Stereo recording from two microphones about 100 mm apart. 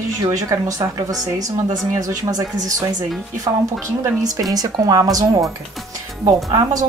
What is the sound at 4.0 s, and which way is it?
A woman's voice, 35° right (ahead or behind).